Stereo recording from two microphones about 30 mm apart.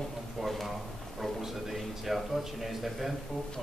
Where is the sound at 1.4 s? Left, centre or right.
Centre.